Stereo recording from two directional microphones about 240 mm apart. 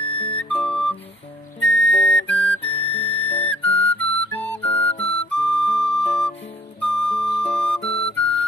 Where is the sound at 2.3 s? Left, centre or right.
Centre.